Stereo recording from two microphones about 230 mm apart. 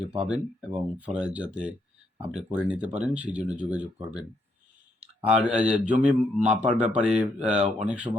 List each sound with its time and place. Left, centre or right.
0.3 s a man's voice: centre
5.5 s a man's voice: centre